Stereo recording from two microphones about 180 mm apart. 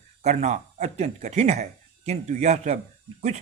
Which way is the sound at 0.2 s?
40° right (ahead or behind).